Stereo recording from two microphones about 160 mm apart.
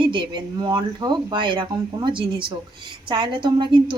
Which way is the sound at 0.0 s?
30° right (ahead or behind).